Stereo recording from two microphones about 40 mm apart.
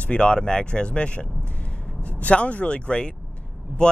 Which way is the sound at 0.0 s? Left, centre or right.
Left.